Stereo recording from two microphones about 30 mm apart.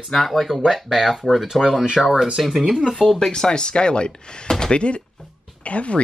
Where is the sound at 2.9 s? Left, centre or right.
Centre.